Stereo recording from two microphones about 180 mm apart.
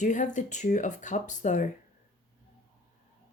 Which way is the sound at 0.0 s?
45° left (ahead or behind).